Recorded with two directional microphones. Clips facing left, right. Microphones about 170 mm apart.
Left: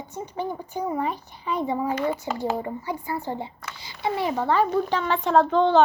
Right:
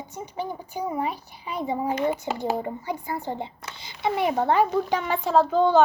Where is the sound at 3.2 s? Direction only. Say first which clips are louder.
Even; 20° right (ahead or behind).